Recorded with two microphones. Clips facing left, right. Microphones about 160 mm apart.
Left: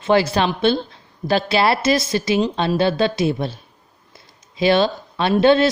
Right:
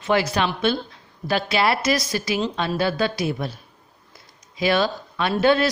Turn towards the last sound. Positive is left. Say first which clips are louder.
# left 4 dB
turn(degrees=25)  # may be behind; listen again after turning